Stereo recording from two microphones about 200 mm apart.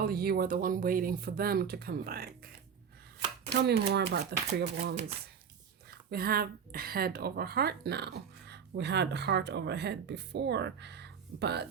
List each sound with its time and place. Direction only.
0.0 s speech: 50° right (ahead or behind)
3.5 s speech: 55° right (ahead or behind)